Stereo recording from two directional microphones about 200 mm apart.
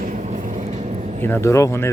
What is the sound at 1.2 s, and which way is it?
Speech, 10° left (ahead or behind).